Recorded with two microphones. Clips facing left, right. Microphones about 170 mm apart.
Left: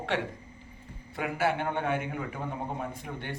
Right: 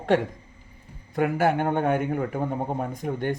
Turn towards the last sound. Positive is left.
turn(degrees=-45)  # may be behind; listen again after turning